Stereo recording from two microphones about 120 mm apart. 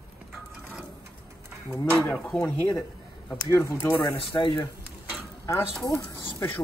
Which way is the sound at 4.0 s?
40° left (ahead or behind).